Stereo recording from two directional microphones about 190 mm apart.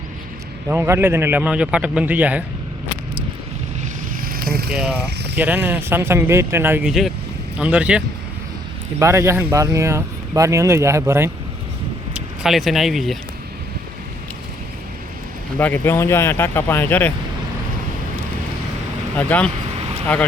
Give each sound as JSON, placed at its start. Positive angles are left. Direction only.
{"t": 0.7, "sound": "speech", "side_deg": -15}
{"t": 4.2, "sound": "vehicle", "side_deg": -50}
{"t": 5.3, "sound": "speech", "side_deg": -10}
{"t": 12.1, "sound": "speech", "side_deg": -5}
{"t": 15.5, "sound": "speech", "side_deg": 10}
{"t": 19.1, "sound": "speech", "side_deg": 10}